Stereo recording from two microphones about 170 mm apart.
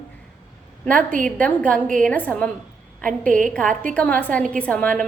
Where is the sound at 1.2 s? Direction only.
5° left (ahead or behind).